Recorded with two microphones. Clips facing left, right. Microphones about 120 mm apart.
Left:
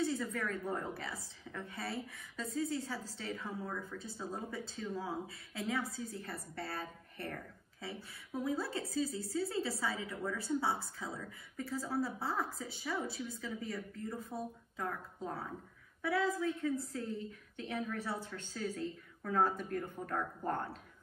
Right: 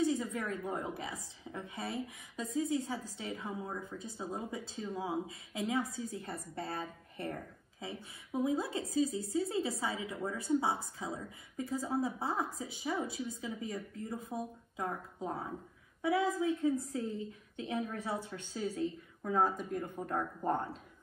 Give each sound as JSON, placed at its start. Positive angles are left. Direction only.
{"t": 0.0, "sound": "a woman's voice", "side_deg": -20}